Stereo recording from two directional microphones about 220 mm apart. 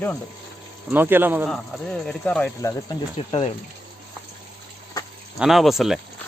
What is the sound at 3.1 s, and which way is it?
Speech, 25° left (ahead or behind).